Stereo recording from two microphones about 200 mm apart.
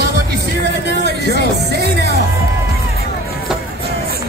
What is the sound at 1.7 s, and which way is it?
Music, 55° right (ahead or behind).